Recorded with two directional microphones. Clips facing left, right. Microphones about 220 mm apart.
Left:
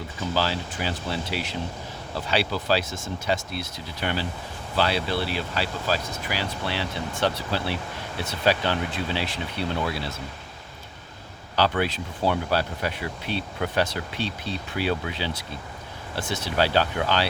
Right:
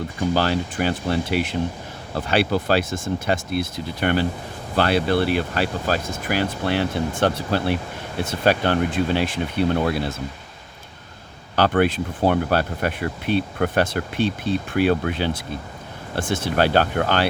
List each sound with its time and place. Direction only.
0.3 s speech: 55° right (ahead or behind)
11.5 s speech: 55° right (ahead or behind)